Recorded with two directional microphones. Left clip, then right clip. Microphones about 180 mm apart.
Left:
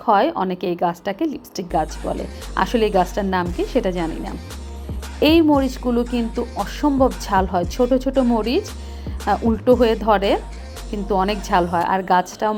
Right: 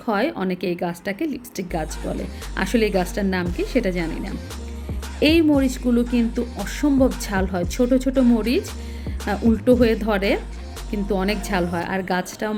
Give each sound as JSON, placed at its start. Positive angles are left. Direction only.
{"t": 0.0, "sound": "a woman's voice", "side_deg": -20}